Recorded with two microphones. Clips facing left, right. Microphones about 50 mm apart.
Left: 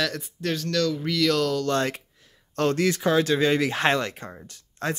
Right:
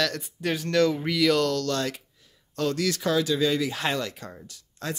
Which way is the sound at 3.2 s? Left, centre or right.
Left.